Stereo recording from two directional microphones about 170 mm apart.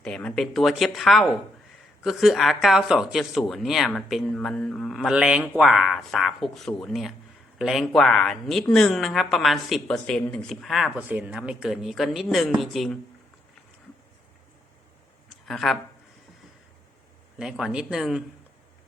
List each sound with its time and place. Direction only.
0.0 s speech: 5° left (ahead or behind)
15.4 s speech: centre (ahead or behind)
17.3 s speech: 5° right (ahead or behind)